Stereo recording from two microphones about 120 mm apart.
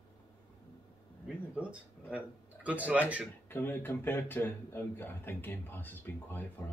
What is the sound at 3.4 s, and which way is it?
Speech, 15° left (ahead or behind).